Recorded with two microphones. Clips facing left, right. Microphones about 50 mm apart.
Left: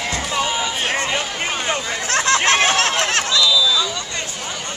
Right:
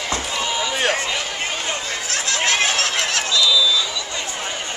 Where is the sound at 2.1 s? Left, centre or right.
Left.